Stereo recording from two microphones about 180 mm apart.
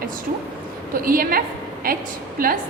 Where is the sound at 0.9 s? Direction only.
55° right (ahead or behind).